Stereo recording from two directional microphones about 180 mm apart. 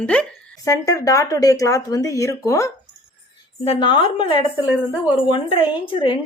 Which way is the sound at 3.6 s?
30° left (ahead or behind).